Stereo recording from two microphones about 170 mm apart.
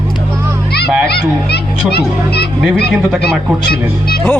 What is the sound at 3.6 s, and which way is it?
Speech, 65° left (ahead or behind).